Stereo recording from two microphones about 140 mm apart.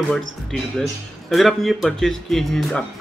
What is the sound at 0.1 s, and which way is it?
Speech, 5° left (ahead or behind).